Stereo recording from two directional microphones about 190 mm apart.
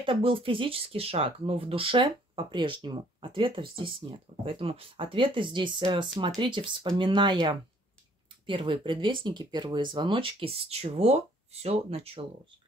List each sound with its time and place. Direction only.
0.0 s speech: 30° right (ahead or behind)